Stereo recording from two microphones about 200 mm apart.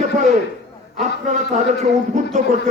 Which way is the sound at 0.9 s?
35° right (ahead or behind).